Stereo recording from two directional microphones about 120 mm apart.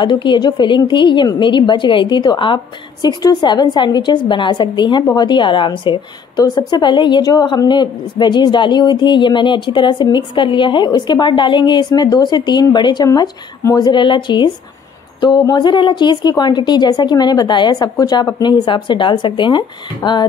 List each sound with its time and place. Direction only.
0.0 s a woman's voice: 40° left (ahead or behind)